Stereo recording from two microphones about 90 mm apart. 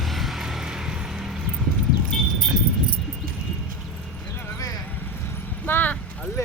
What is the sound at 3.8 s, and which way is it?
Clip-clop, centre (ahead or behind).